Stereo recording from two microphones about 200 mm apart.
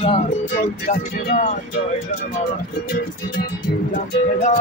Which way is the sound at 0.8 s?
35° left (ahead or behind).